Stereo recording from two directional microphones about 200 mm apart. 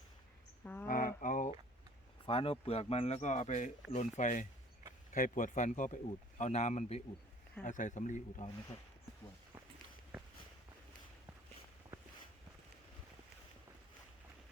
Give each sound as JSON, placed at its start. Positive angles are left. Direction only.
{"t": 0.6, "sound": "speech", "side_deg": 10}
{"t": 0.9, "sound": "a sound", "side_deg": 45}
{"t": 2.2, "sound": "speech", "side_deg": 30}